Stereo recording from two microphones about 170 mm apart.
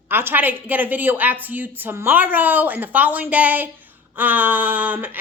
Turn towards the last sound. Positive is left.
turn(degrees=-10)  # may be behind; listen again after turning